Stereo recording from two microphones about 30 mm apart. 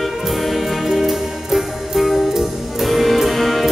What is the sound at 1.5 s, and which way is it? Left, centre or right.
Music, centre.